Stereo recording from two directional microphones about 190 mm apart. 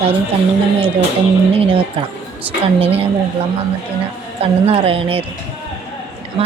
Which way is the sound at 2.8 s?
30° right (ahead or behind).